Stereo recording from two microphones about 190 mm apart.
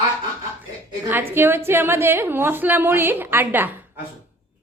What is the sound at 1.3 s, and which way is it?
A woman's voice, 10° right (ahead or behind).